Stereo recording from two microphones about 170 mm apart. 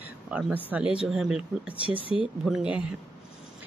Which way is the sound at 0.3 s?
10° right (ahead or behind).